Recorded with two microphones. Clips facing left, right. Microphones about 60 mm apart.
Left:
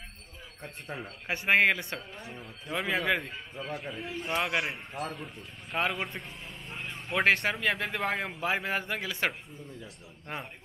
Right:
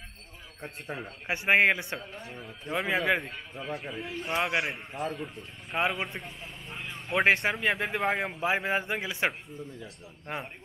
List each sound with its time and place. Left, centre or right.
0.6 s speech: centre
2.7 s a man's voice: centre
5.9 s vehicle: centre
7.2 s speech: centre
7.7 s speech: centre
8.4 s speech: centre